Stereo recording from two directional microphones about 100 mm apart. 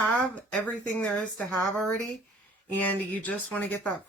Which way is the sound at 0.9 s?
10° left (ahead or behind).